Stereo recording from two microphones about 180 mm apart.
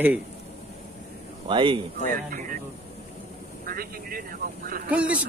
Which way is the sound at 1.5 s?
30° right (ahead or behind).